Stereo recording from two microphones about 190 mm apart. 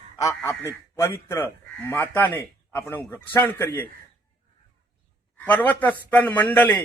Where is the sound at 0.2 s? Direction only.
15° left (ahead or behind).